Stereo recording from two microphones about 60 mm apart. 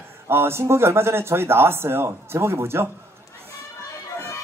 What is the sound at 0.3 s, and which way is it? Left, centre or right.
Speech, right.